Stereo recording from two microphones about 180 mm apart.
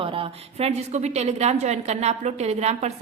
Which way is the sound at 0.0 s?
30° right (ahead or behind).